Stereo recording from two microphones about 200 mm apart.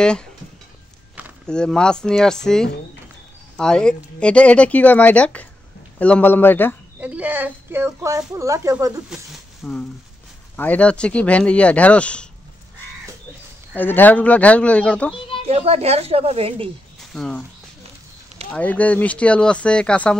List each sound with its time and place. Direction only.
0.0 s speech: 5° left (ahead or behind)
1.4 s speech: 5° left (ahead or behind)
7.0 s a woman's voice: 5° right (ahead or behind)
9.1 s a sound: 5° left (ahead or behind)
10.5 s speech: 5° left (ahead or behind)
13.7 s speech: 10° left (ahead or behind)
15.4 s speech: 30° right (ahead or behind)
16.6 s speech: 5° left (ahead or behind)
18.5 s speech: 5° left (ahead or behind)